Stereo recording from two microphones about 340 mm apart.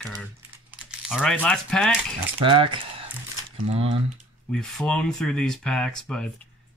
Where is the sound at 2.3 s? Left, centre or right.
Centre.